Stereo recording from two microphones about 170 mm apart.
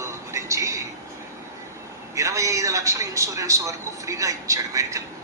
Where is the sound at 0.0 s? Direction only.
15° right (ahead or behind).